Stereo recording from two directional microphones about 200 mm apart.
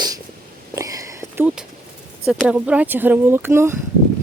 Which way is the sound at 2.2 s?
Centre (ahead or behind).